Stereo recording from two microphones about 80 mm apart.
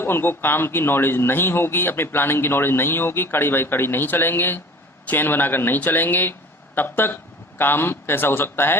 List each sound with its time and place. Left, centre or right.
0.0 s speech: left